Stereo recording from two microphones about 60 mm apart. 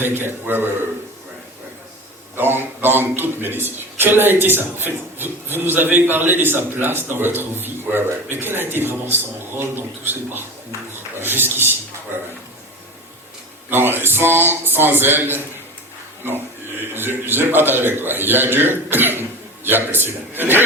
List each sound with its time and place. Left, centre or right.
0.0 s a man's voice: right
2.3 s a man's voice: right
13.7 s a man's voice: right
16.9 s a man's voice: right